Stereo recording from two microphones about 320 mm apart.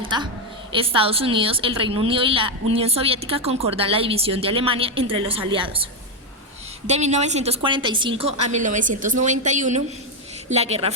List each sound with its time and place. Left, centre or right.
0.0 s a woman's voice: centre